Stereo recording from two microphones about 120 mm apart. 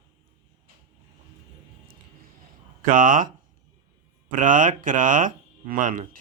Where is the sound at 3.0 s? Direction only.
90° right.